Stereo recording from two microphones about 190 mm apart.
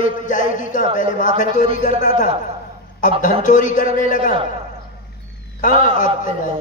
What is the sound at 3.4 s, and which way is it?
Speech, 40° left (ahead or behind).